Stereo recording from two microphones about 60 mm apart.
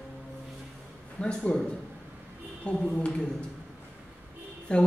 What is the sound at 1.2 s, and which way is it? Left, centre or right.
Speech, centre.